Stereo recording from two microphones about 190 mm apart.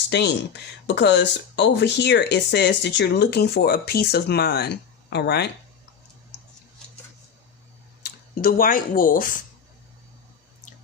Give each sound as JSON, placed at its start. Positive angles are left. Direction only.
{"t": 0.1, "sound": "speech", "side_deg": 60}
{"t": 8.0, "sound": "speech", "side_deg": 50}